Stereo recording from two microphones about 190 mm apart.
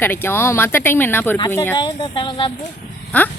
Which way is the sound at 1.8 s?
25° left (ahead or behind).